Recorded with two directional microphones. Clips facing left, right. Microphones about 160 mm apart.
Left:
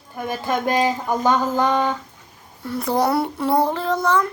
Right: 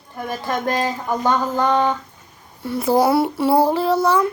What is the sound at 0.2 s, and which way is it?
Speech, 15° left (ahead or behind).